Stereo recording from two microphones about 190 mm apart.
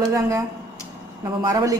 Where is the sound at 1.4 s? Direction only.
15° right (ahead or behind).